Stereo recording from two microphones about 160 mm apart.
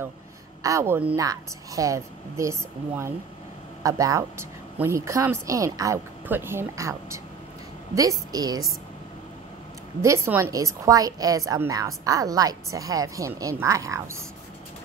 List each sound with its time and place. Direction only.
0.6 s a woman's voice: 20° right (ahead or behind)
3.8 s a woman's voice: 20° right (ahead or behind)
10.0 s a woman's voice: 15° right (ahead or behind)